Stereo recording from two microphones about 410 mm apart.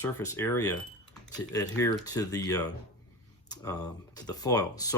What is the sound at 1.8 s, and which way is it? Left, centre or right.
Speech, centre.